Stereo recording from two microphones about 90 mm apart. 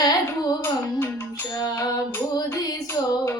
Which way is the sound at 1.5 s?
45° left (ahead or behind).